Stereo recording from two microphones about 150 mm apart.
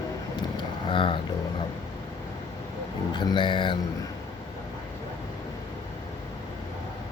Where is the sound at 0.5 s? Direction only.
35° left (ahead or behind).